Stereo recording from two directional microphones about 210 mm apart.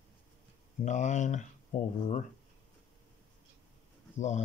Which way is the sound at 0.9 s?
35° left (ahead or behind).